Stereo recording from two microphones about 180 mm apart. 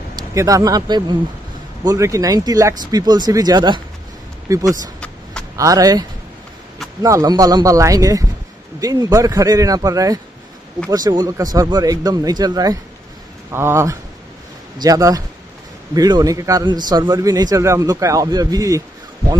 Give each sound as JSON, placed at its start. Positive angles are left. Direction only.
{"t": 0.3, "sound": "a man's voice", "side_deg": -15}